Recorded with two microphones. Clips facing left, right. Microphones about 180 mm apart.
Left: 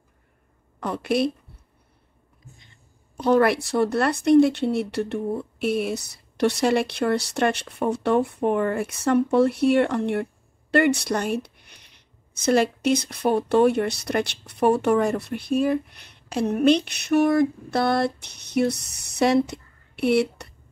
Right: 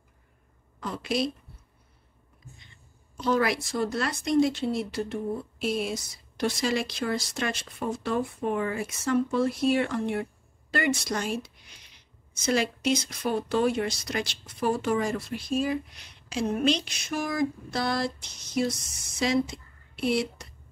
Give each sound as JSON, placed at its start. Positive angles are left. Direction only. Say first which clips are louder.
{"t": 0.7, "sound": "speech", "louder": "left 6 dB", "side_deg": 60}
{"t": 3.2, "sound": "speech", "louder": "left 7 dB", "side_deg": 60}